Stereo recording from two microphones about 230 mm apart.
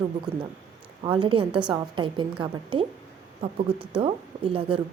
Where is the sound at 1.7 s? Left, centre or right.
Right.